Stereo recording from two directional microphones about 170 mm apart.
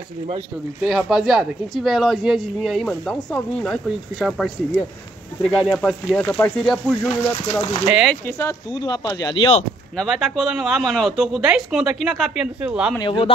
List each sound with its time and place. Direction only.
0.8 s speech: 5° right (ahead or behind)
7.8 s speech: 5° right (ahead or behind)
8.3 s speech: 20° left (ahead or behind)
9.9 s speech: centre (ahead or behind)
13.0 s speech: 30° left (ahead or behind)